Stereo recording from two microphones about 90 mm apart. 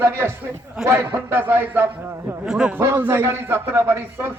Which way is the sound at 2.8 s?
25° right (ahead or behind).